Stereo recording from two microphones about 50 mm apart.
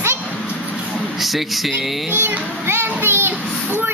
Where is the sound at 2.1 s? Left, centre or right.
Right.